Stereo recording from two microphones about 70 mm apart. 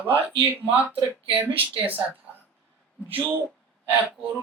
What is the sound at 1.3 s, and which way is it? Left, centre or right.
Speech, right.